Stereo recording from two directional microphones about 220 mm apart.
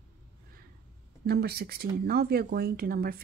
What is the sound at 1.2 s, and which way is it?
Speech, 45° right (ahead or behind).